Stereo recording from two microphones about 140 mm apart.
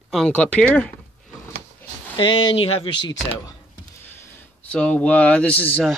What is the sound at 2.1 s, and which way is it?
Speech, 35° left (ahead or behind).